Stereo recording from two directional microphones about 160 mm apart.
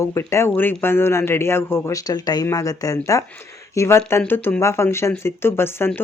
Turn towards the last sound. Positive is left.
turn(degrees=15)  # may be behind; listen again after turning